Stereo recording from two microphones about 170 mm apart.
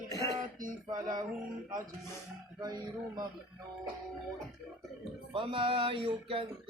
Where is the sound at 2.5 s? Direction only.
25° right (ahead or behind).